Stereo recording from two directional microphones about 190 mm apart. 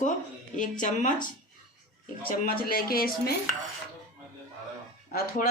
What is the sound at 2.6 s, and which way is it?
Speech, 50° left (ahead or behind).